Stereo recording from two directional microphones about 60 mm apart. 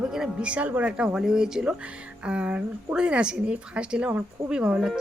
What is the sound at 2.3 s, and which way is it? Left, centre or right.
Speech, right.